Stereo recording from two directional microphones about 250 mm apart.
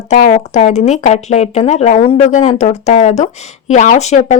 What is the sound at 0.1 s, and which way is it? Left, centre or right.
Speech, left.